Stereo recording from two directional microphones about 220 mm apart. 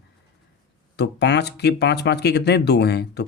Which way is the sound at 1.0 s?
50° left (ahead or behind).